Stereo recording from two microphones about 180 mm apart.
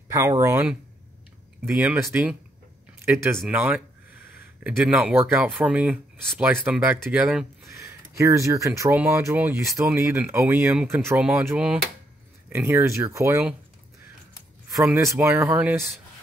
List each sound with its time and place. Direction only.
0.1 s speech: 20° right (ahead or behind)
1.8 s speech: 10° right (ahead or behind)
7.6 s speech: 15° right (ahead or behind)
14.9 s speech: 15° right (ahead or behind)